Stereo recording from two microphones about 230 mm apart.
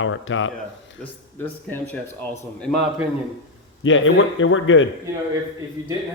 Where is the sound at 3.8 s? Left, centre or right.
Left.